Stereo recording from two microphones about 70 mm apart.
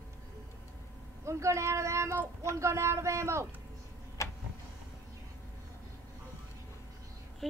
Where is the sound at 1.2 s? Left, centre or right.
Right.